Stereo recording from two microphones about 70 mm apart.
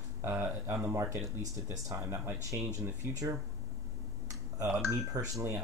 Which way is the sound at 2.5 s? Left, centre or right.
Right.